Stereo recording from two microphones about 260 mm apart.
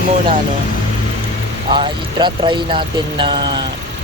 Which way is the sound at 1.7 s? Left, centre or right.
Centre.